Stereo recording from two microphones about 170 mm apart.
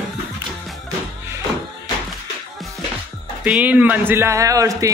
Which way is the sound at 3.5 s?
10° right (ahead or behind).